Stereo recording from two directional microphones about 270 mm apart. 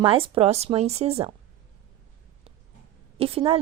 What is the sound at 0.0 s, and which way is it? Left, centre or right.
Speech, centre.